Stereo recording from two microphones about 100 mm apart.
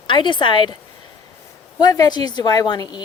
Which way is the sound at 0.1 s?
55° left (ahead or behind).